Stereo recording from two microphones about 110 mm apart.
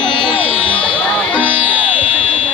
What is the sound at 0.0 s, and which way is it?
Music, 50° left (ahead or behind).